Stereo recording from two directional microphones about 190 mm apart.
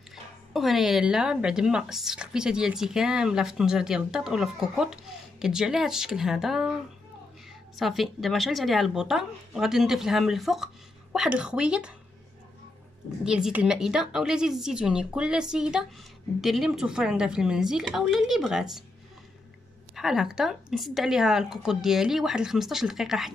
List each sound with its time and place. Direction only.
0.1 s speech: centre (ahead or behind)
7.7 s speech: centre (ahead or behind)
13.2 s speech: 5° right (ahead or behind)
20.0 s speech: 5° right (ahead or behind)